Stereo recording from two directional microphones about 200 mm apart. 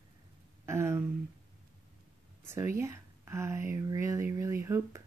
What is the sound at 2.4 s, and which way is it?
Speech, 15° right (ahead or behind).